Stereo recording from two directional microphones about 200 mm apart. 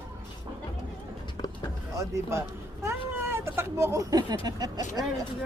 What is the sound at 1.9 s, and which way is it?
Speech, 15° right (ahead or behind).